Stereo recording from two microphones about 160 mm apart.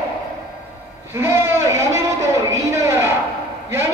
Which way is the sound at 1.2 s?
15° right (ahead or behind).